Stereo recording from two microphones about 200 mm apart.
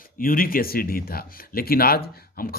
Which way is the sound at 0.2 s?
45° left (ahead or behind).